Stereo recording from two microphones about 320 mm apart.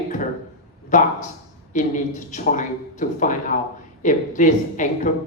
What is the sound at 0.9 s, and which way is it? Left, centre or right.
Speech, left.